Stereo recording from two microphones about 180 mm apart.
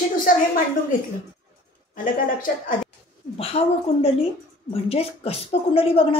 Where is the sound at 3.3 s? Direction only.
35° left (ahead or behind).